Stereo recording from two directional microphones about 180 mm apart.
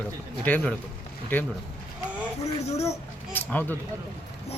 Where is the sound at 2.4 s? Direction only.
35° left (ahead or behind).